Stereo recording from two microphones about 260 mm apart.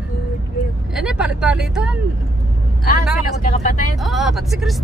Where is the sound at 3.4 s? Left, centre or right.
Left.